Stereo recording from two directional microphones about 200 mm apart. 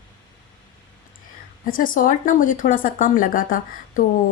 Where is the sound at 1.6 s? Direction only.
45° left (ahead or behind).